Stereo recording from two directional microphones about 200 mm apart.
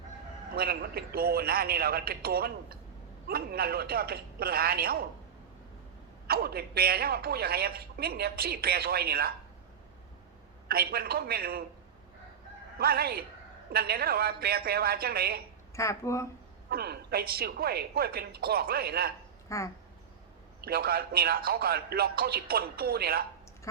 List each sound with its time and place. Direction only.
0.5 s a man's voice: 50° right (ahead or behind)
6.2 s a man's voice: 50° right (ahead or behind)
10.7 s a man's voice: 50° right (ahead or behind)
12.8 s a man's voice: 50° right (ahead or behind)
15.7 s speech: 15° left (ahead or behind)
16.6 s a man's voice: 55° right (ahead or behind)
19.5 s speech: 15° left (ahead or behind)
20.6 s a man's voice: 50° right (ahead or behind)